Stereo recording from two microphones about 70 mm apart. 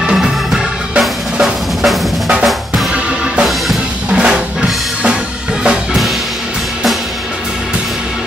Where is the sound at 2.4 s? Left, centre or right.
Centre.